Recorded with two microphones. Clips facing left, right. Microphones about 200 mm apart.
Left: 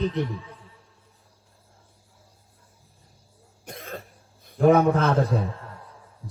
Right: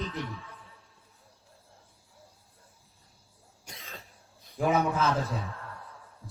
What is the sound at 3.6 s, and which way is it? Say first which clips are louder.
Throat clearing: left 10 dB; 55° left (ahead or behind).